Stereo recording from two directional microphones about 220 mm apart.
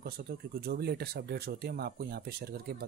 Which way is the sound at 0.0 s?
45° right (ahead or behind).